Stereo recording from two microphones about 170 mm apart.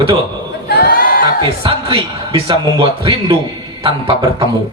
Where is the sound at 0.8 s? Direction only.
55° left (ahead or behind).